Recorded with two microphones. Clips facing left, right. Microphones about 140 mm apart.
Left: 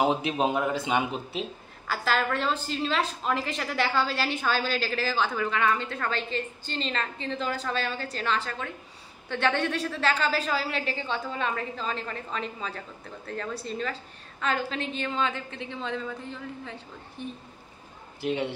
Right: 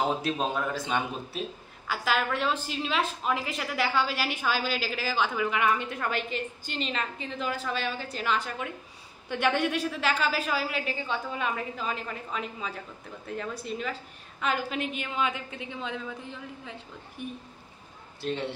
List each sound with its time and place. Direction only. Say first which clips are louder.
0.0 s a man's voice: left 3 dB; 15° left (ahead or behind)
1.9 s a woman's voice: left 1 dB; 5° right (ahead or behind)
18.2 s a man's voice: left 3 dB; 15° left (ahead or behind)